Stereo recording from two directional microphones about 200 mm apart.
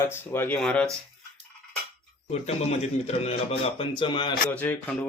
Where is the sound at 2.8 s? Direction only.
30° left (ahead or behind).